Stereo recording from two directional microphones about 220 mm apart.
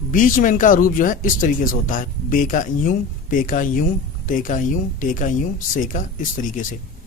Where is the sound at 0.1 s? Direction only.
35° left (ahead or behind).